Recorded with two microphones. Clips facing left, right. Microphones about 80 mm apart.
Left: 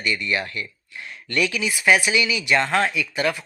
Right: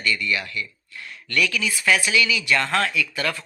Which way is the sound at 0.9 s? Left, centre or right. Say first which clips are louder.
Even; left.